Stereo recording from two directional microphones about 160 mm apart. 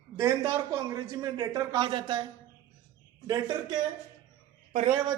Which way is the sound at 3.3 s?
25° right (ahead or behind).